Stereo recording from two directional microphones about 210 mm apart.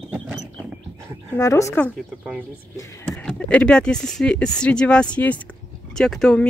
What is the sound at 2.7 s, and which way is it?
Speech, 15° left (ahead or behind).